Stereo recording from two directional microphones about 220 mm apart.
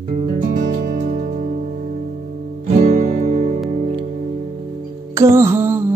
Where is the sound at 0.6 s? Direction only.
35° right (ahead or behind).